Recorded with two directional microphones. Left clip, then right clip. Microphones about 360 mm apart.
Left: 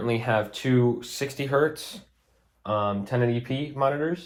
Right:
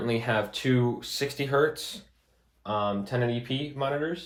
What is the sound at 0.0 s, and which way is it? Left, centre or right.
Speech, centre.